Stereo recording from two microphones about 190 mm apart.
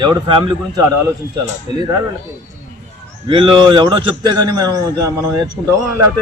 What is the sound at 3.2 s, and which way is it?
A man's voice, 25° right (ahead or behind).